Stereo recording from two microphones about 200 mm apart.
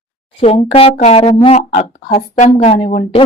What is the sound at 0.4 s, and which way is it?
Speech, 30° left (ahead or behind).